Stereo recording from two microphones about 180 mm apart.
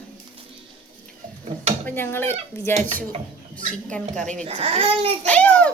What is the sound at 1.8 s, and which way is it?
Speech, 10° left (ahead or behind).